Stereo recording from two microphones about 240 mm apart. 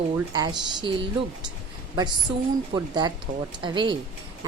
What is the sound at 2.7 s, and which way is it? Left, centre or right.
A woman's voice, centre.